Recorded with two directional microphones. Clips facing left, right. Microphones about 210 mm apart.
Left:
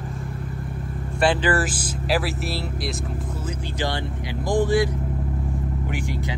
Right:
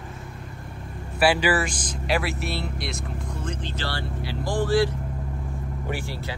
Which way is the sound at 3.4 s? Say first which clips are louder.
Left 4 dB; 15° left (ahead or behind).